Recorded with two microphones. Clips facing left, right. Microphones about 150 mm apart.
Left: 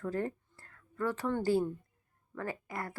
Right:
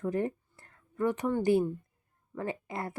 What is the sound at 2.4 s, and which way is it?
Speech, 25° right (ahead or behind).